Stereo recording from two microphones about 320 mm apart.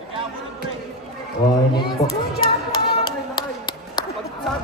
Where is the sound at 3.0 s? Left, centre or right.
Centre.